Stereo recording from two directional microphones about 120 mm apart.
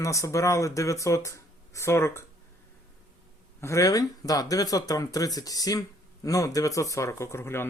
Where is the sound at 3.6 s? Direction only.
25° left (ahead or behind).